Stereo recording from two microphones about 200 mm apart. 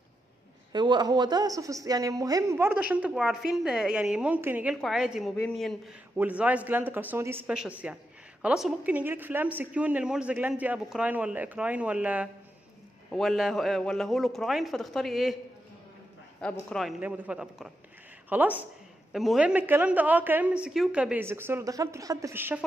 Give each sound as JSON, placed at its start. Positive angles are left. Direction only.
{"t": 0.7, "sound": "a man's voice", "side_deg": -20}
{"t": 16.3, "sound": "a man's voice", "side_deg": 5}